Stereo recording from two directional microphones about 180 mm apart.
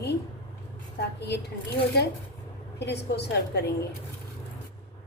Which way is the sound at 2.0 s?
65° left (ahead or behind).